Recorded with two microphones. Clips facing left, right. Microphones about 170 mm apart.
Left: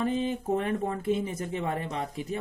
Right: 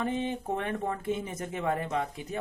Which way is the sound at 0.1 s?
30° left (ahead or behind).